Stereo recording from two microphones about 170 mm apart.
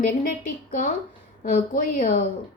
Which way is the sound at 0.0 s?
55° left (ahead or behind).